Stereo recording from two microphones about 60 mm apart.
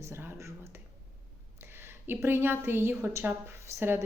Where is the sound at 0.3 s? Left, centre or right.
Right.